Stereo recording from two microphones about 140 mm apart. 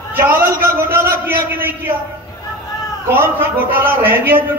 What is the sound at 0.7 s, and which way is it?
A man's voice, 15° right (ahead or behind).